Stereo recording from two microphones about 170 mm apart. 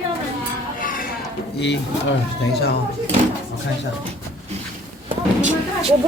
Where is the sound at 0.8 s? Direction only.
55° left (ahead or behind).